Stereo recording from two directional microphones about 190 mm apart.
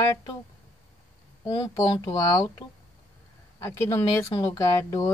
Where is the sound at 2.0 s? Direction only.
20° left (ahead or behind).